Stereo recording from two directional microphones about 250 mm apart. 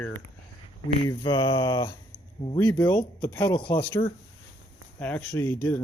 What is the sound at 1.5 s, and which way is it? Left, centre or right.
Speech, centre.